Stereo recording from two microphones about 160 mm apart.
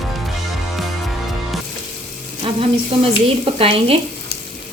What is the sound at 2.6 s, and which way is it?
Speech, 35° right (ahead or behind).